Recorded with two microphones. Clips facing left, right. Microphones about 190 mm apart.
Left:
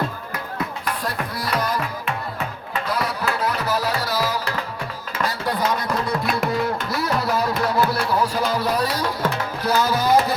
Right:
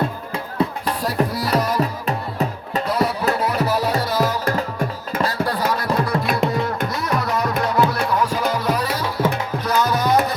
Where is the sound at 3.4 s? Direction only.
Centre (ahead or behind).